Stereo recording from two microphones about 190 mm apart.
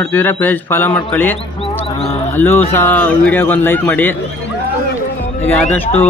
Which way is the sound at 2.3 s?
10° left (ahead or behind).